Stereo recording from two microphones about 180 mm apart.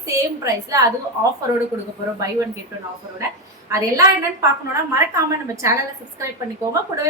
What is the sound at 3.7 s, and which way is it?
Speech, 15° right (ahead or behind).